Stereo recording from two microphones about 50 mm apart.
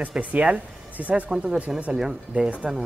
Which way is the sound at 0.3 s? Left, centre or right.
Right.